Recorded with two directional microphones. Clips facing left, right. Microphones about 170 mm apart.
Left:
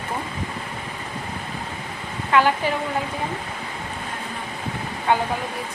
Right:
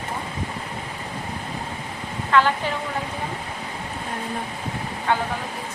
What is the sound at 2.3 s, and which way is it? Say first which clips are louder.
Speech: left 1 dB; 10° left (ahead or behind).